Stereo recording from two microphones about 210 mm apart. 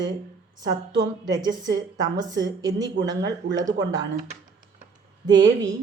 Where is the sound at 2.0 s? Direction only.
20° right (ahead or behind).